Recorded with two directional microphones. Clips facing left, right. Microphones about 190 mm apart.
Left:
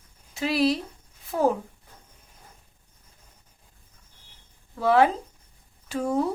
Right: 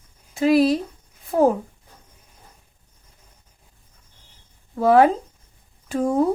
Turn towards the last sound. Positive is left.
turn(degrees=-50)  # may be behind; listen again after turning